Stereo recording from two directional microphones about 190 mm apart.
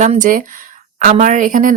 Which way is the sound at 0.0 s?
40° right (ahead or behind).